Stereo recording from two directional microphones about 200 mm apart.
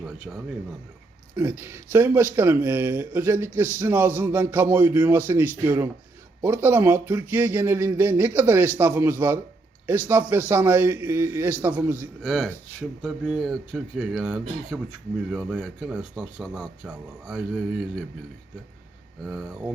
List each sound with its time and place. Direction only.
0.3 s speech: 10° right (ahead or behind)
19.2 s speech: centre (ahead or behind)